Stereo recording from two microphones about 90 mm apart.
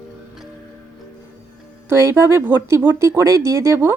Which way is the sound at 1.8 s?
30° right (ahead or behind).